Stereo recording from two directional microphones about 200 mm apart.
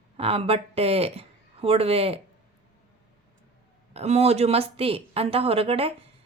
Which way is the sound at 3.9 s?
30° right (ahead or behind).